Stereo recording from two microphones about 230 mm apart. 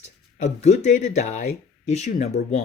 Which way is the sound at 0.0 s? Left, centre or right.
Left.